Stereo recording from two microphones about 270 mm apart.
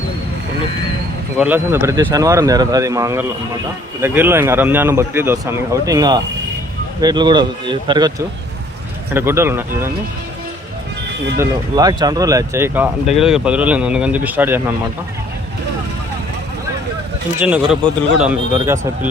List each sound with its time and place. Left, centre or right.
1.4 s speech: centre
9.1 s speech: centre
11.3 s speech: centre
17.4 s speech: centre